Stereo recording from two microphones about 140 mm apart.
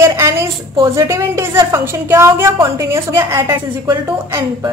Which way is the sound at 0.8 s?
20° right (ahead or behind).